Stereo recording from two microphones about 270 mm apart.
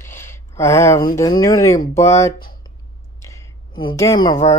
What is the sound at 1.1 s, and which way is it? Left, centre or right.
Speech, centre.